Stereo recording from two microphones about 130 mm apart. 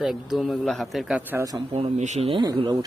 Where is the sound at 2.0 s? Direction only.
60° right (ahead or behind).